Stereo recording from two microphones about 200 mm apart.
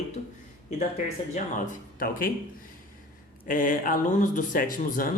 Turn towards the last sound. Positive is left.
turn(degrees=45)  # may be behind; listen again after turning